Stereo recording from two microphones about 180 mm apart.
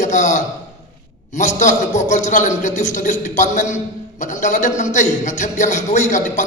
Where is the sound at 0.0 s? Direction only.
40° left (ahead or behind).